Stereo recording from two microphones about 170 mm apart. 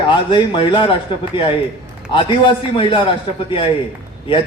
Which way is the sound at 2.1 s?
30° left (ahead or behind).